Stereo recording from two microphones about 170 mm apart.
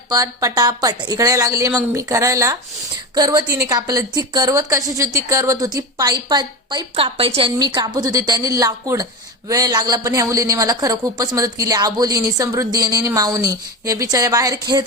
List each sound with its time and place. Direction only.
0.1 s speech: 20° right (ahead or behind)